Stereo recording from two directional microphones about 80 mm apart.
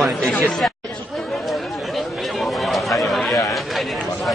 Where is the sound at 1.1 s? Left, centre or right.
Centre.